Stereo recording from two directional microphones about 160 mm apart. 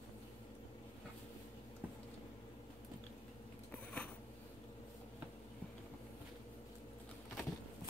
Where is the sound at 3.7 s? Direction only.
10° left (ahead or behind).